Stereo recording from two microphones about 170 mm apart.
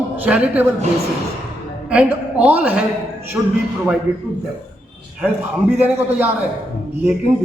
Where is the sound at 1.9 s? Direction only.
5° right (ahead or behind).